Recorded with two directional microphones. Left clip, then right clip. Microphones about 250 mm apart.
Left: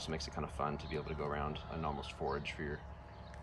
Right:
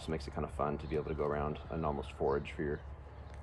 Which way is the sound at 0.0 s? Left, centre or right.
Centre.